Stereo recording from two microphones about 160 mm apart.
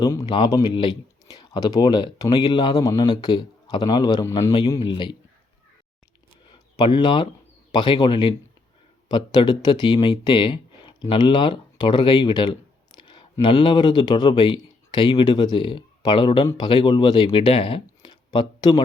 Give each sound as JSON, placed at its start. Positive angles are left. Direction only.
{"t": 0.0, "sound": "speech", "side_deg": 25}
{"t": 4.8, "sound": "speech", "side_deg": 30}
{"t": 6.5, "sound": "a sound", "side_deg": 30}
{"t": 7.7, "sound": "speech", "side_deg": 30}